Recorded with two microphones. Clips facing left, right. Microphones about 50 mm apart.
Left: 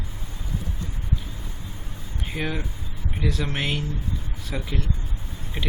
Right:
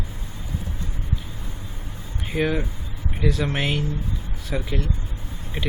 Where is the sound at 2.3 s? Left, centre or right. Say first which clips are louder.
Right 6 dB; centre.